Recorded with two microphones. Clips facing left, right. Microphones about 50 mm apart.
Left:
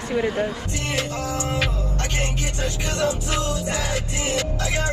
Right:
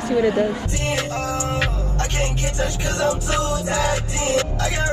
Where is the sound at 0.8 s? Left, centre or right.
Right.